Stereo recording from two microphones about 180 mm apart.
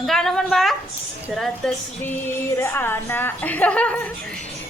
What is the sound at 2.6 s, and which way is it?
Speech, 15° left (ahead or behind).